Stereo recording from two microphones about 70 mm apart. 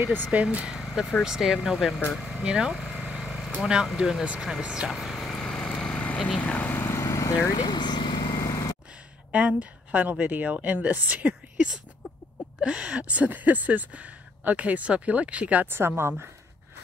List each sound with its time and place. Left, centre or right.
0.0 s speech: right
0.7 s vehicle: centre
1.2 s speech: centre
2.1 s vehicle: centre
2.4 s speech: centre
3.0 s vehicle: centre
3.6 s speech: centre
4.9 s vehicle: centre
6.7 s lawn mower: left
7.1 s lawn mower: left
7.5 s vehicle: left
8.4 s vehicle: left
9.3 s speech: centre
16.0 s speech: right